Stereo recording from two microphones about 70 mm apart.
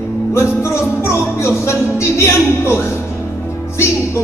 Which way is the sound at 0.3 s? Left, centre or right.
Left.